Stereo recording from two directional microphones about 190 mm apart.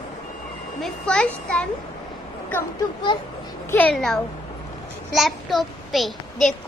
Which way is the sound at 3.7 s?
10° left (ahead or behind).